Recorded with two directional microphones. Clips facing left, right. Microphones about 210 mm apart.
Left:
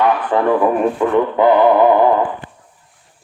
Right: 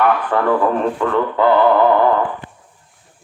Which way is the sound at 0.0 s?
15° left (ahead or behind).